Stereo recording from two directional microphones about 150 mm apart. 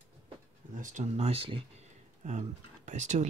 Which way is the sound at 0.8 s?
55° right (ahead or behind).